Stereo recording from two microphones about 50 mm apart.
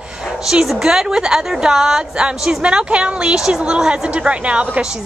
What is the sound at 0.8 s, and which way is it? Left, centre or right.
A woman's voice, centre.